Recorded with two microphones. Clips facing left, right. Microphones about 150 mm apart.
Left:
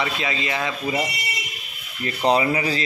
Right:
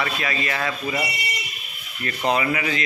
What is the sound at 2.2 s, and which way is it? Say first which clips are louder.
Speech: left 3 dB; 30° left (ahead or behind).